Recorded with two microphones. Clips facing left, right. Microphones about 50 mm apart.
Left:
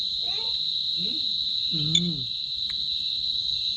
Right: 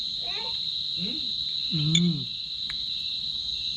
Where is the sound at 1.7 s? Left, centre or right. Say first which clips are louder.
Right 3 dB; right.